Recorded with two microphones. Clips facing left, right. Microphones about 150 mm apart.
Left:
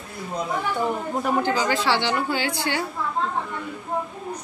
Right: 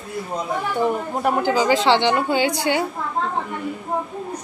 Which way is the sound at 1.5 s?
15° right (ahead or behind).